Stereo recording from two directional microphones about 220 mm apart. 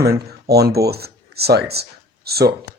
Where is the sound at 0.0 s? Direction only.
45° right (ahead or behind).